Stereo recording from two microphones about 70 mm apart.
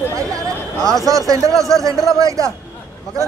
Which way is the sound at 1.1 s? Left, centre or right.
Right.